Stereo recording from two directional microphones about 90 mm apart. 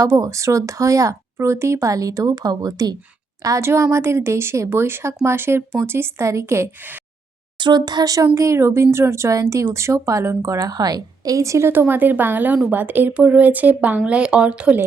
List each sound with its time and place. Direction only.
0.0 s speech: 35° right (ahead or behind)
3.4 s speech: 35° right (ahead or behind)
7.6 s speech: 55° right (ahead or behind); by 14.8 s 10° right (ahead or behind)